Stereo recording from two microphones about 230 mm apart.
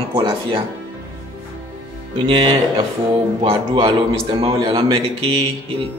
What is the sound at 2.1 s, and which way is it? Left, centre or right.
A man's voice, right.